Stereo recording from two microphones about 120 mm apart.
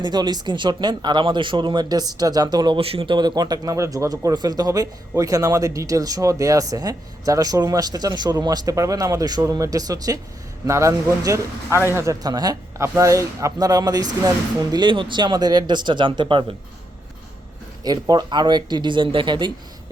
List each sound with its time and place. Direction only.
0.0 s speech: 35° right (ahead or behind)
2.8 s speech: 50° right (ahead or behind)
18.1 s speech: 35° right (ahead or behind)